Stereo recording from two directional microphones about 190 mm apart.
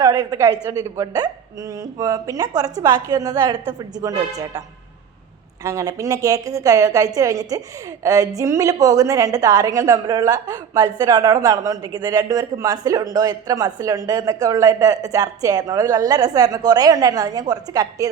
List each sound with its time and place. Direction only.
0.0 s a woman's voice: 20° right (ahead or behind)
5.6 s a woman's voice: 15° right (ahead or behind)